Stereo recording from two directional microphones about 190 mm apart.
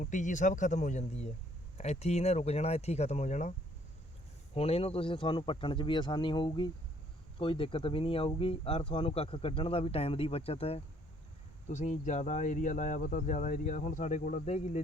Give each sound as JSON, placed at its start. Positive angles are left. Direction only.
{"t": 0.0, "sound": "speech", "side_deg": 40}
{"t": 4.5, "sound": "speech", "side_deg": 30}